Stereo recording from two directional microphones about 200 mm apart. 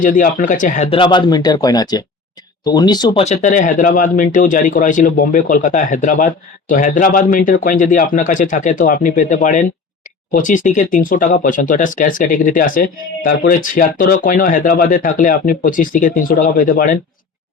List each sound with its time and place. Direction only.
0.0 s speech: 45° left (ahead or behind)